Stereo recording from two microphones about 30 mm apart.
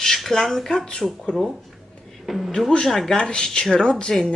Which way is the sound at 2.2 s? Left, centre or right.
Centre.